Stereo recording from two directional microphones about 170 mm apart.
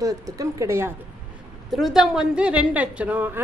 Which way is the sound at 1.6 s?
Centre (ahead or behind).